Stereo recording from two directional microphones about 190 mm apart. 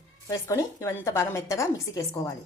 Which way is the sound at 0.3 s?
15° left (ahead or behind).